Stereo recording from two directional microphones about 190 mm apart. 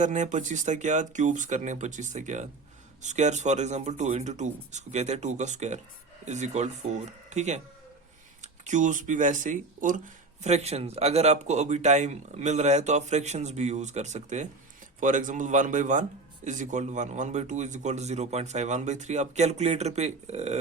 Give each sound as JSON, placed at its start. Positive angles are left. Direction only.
{"t": 0.0, "sound": "speech", "side_deg": -40}